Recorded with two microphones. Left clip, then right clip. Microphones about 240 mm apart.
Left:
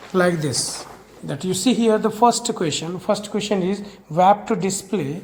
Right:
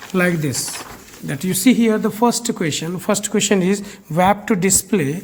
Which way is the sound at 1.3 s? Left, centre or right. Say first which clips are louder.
Right 4 dB; right.